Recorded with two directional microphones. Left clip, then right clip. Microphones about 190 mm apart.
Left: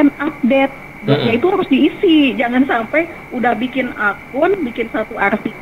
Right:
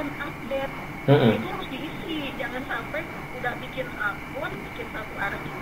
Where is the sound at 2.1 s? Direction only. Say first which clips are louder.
Left 17 dB; 30° left (ahead or behind).